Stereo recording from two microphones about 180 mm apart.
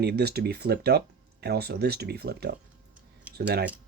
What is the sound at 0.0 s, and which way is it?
Speech, 65° right (ahead or behind).